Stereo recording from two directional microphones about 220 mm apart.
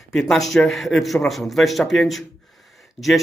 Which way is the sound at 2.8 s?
Centre (ahead or behind).